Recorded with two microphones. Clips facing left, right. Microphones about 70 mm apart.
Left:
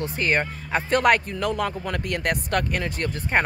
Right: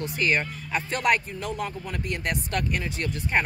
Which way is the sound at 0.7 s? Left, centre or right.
Left.